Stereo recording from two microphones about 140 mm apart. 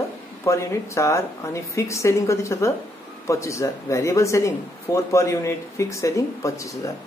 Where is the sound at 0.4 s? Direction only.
20° left (ahead or behind).